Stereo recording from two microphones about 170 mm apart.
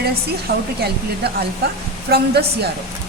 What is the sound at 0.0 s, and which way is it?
Speech, 70° right (ahead or behind).